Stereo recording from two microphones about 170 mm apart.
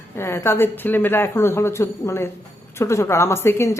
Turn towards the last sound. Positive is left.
turn(degrees=15)  # may be behind; listen again after turning